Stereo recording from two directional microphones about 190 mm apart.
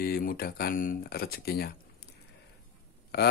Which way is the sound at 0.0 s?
50° left (ahead or behind).